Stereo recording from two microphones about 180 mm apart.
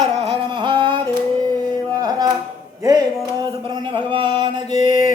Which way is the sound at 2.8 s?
20° right (ahead or behind).